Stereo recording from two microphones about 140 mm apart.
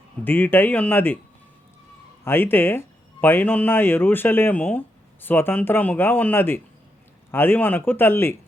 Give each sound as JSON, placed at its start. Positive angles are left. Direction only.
{"t": 0.3, "sound": "speech", "side_deg": 15}
{"t": 2.2, "sound": "speech", "side_deg": 15}